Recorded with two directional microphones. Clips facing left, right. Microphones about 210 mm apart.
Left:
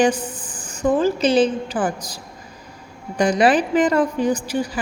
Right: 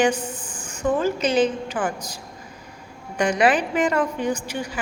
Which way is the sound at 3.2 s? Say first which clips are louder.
Left 3 dB; 35° left (ahead or behind).